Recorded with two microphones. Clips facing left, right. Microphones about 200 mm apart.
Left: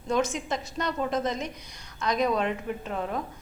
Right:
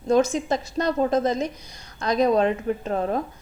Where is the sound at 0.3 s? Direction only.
35° right (ahead or behind).